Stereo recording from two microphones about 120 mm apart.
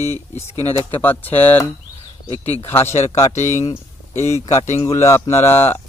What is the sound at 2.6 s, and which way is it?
Speech, 20° left (ahead or behind).